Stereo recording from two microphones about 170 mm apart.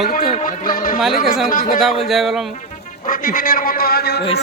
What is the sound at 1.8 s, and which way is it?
Speech, centre (ahead or behind).